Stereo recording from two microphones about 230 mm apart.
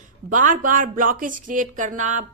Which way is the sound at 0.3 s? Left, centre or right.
Right.